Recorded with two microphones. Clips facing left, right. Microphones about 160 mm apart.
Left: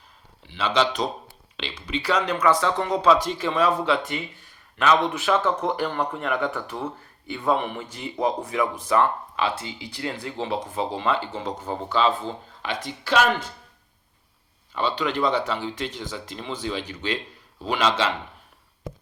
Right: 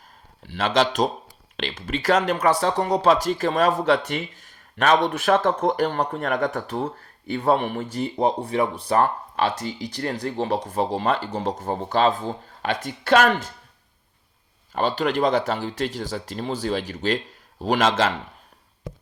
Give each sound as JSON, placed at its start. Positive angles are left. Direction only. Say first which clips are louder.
{"t": 0.4, "sound": "speech", "louder": "right 2 dB", "side_deg": -45}
{"t": 4.8, "sound": "speech", "louder": "right 2 dB", "side_deg": -55}
{"t": 14.7, "sound": "speech", "louder": "right 3 dB", "side_deg": -45}